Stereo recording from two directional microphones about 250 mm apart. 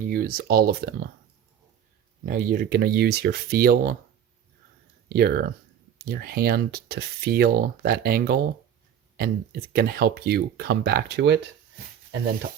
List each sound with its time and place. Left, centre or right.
0.1 s speech: right
2.2 s speech: right
5.0 s speech: right